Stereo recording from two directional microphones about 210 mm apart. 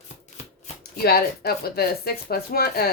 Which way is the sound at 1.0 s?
45° left (ahead or behind).